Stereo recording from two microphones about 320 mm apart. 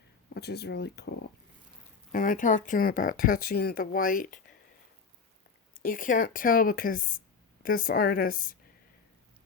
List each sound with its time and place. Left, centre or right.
0.3 s speech: left
2.1 s speech: left
5.8 s speech: left